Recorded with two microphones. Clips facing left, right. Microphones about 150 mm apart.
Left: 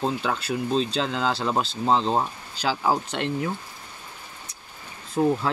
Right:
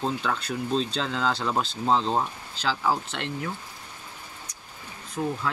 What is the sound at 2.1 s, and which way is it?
Speech, 10° left (ahead or behind).